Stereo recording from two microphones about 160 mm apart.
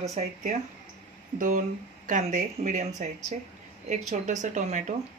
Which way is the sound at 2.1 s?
50° right (ahead or behind).